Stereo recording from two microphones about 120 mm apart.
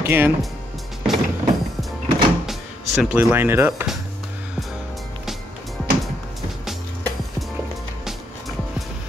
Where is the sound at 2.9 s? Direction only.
5° right (ahead or behind).